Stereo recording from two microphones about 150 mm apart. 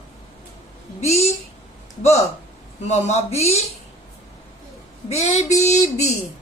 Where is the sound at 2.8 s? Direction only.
50° left (ahead or behind).